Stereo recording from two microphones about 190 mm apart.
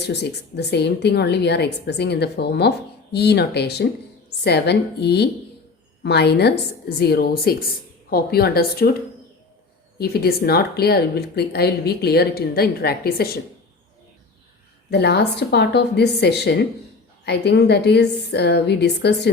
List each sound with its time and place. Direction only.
0.0 s a woman's voice: 60° left (ahead or behind)
10.0 s a woman's voice: 55° left (ahead or behind)
14.8 s a woman's voice: 60° left (ahead or behind)